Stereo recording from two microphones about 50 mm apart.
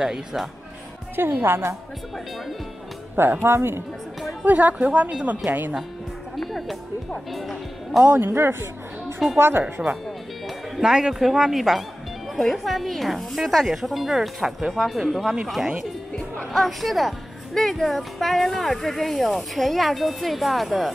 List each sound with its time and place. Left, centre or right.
0.0 s speech: centre
1.1 s speech: right
3.2 s speech: right
4.5 s a woman's voice: right
6.3 s music: centre
7.3 s speech: centre
8.2 s speech: right
10.8 s speech: centre
14.7 s speech: centre